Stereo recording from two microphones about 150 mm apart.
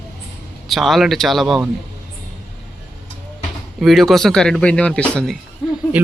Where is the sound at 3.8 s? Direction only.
Centre (ahead or behind).